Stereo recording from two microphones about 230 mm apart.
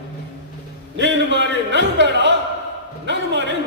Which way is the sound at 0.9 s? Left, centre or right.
Right.